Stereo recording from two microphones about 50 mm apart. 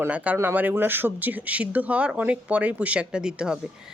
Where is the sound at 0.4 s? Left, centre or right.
Right; by 3.6 s centre.